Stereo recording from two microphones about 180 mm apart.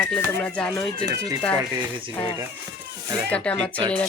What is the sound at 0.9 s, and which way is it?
Speech, 20° right (ahead or behind).